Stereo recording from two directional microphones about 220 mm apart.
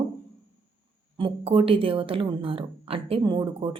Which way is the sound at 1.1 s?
25° right (ahead or behind).